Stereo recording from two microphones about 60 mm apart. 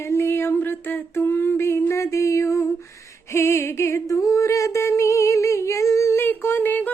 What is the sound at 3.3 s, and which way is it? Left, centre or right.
Music, left.